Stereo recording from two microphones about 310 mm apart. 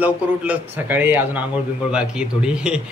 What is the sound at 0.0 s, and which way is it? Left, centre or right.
A man's voice, centre.